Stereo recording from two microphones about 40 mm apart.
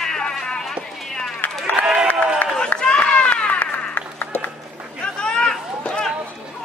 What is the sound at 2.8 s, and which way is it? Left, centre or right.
Run, left.